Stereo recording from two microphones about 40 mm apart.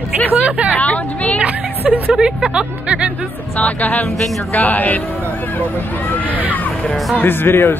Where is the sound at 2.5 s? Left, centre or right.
Right.